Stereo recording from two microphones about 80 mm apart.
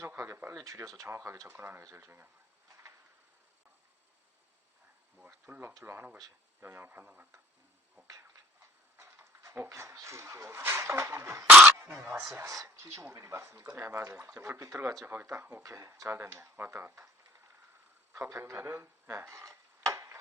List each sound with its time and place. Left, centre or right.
0.2 s speech: right
0.5 s speech: right
1.0 s speech: right
5.5 s speech: right
9.0 s speech: right
11.4 s speech: centre
12.3 s speech: right
15.0 s speech: right
18.1 s a sound: right